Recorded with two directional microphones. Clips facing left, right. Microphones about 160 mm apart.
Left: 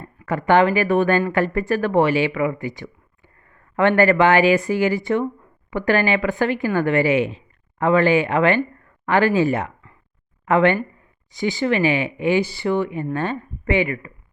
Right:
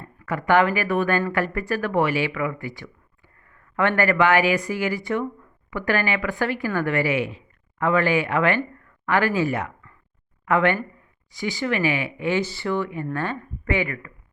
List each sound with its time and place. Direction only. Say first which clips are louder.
0.3 s a woman's voice: left 3 dB; 25° left (ahead or behind)